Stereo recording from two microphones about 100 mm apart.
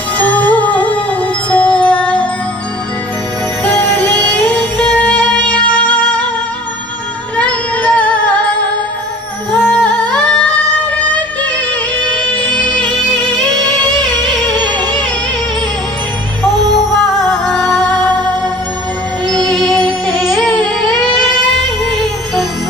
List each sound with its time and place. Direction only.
0.2 s music: 15° left (ahead or behind)
3.6 s music: 15° left (ahead or behind)
7.3 s music: 15° left (ahead or behind)
9.6 s music: 5° left (ahead or behind)
12.0 s music: 10° left (ahead or behind)
12.9 s music: centre (ahead or behind)
16.7 s music: centre (ahead or behind)
19.5 s music: 5° left (ahead or behind)